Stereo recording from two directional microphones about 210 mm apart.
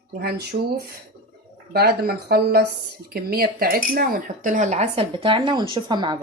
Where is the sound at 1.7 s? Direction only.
45° right (ahead or behind).